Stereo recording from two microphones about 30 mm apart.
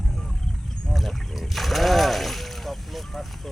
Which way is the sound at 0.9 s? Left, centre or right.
Centre.